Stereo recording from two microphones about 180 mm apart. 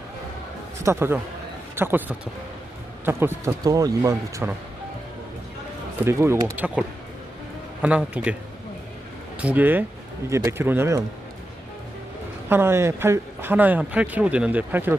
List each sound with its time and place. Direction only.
0.8 s speech: 15° right (ahead or behind)
6.1 s speech: 15° right (ahead or behind)
9.4 s speech: 10° right (ahead or behind)
12.5 s speech: 15° right (ahead or behind)